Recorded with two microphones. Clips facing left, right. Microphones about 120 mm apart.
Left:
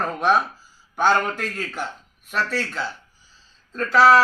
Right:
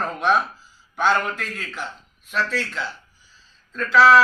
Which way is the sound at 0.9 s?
40° left (ahead or behind).